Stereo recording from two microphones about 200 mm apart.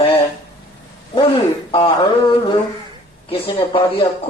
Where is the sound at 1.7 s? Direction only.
25° left (ahead or behind).